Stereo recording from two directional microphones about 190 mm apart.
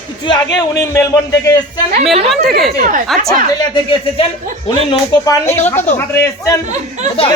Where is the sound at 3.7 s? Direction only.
25° left (ahead or behind).